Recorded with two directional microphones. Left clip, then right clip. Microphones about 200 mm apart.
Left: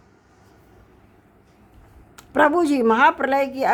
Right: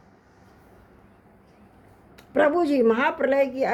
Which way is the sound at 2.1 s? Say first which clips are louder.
Left 3 dB; 30° left (ahead or behind).